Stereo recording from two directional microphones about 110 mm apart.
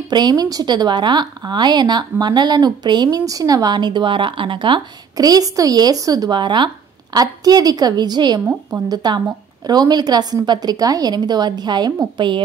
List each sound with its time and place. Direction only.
0.1 s a woman's voice: 40° right (ahead or behind)